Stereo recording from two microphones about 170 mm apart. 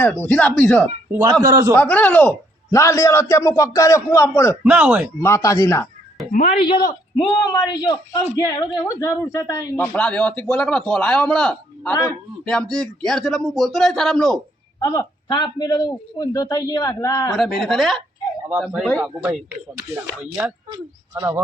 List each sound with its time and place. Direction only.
0.0 s a man's voice: 10° left (ahead or behind)
1.1 s a man's voice: 20° right (ahead or behind)
1.7 s a man's voice: 10° left (ahead or behind)
4.6 s speech: 10° right (ahead or behind)
5.2 s a man's voice: 15° left (ahead or behind)
6.6 s a man's voice: 30° left (ahead or behind)
9.8 s a man's voice: 5° left (ahead or behind)
14.8 s a man's voice: 20° left (ahead or behind)
17.3 s a man's voice: centre (ahead or behind)